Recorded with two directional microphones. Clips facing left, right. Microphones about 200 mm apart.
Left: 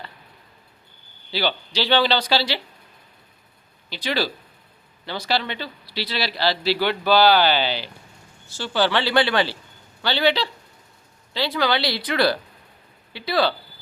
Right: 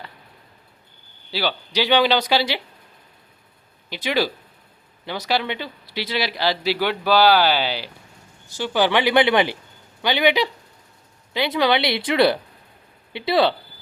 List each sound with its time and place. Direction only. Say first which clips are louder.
1.3 s speech: even; 5° right (ahead or behind)
5.0 s speech: right 2 dB; 10° right (ahead or behind)